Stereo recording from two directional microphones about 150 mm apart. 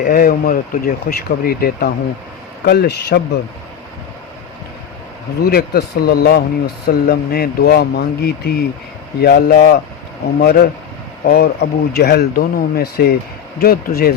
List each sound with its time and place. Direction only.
0.0 s speech: 75° left (ahead or behind); by 3.2 s 90° left
5.4 s speech: 90° left